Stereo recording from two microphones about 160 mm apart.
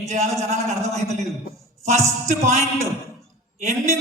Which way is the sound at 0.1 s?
45° right (ahead or behind).